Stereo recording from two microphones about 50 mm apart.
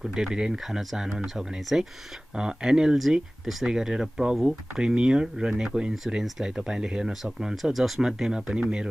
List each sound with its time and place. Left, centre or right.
0.0 s speech: centre
7.7 s speech: centre